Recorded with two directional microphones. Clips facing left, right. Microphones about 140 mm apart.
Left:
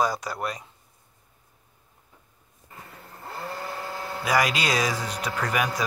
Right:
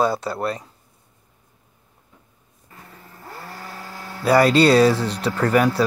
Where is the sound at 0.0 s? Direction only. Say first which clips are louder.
Right 5 dB; 30° right (ahead or behind).